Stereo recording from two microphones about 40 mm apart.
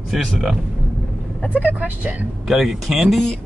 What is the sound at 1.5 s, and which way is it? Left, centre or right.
Speech, right.